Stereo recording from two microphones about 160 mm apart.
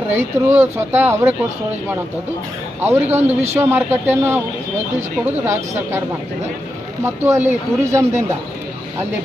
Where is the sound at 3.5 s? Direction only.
15° right (ahead or behind).